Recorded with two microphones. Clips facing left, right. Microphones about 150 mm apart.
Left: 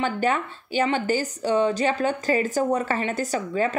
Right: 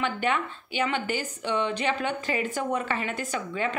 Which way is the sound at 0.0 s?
40° left (ahead or behind).